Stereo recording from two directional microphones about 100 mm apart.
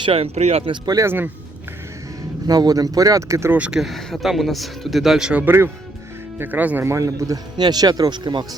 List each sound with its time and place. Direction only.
0.0 s speech: 80° right
0.9 s speech: 20° right (ahead or behind)
2.5 s speech: 40° right (ahead or behind)
3.5 s speech: 15° right (ahead or behind)
3.8 s speech: centre (ahead or behind); by 6.9 s 20° right (ahead or behind)
6.9 s speech: 35° right (ahead or behind); by 8.4 s 50° right (ahead or behind)